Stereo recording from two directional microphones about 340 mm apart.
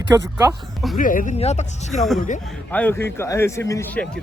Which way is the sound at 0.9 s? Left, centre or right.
Left.